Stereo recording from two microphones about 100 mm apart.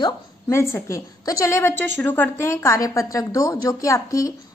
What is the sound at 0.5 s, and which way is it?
A woman's voice, 25° left (ahead or behind).